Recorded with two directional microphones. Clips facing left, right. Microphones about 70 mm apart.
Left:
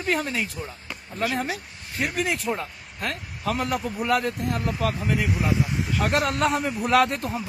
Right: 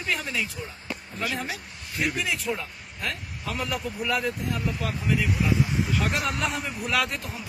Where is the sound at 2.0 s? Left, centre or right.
Left.